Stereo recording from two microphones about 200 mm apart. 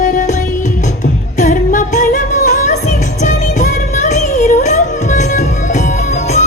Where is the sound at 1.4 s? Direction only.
40° left (ahead or behind).